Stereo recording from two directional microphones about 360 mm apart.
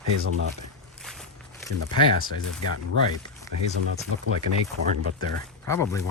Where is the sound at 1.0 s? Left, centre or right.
Centre.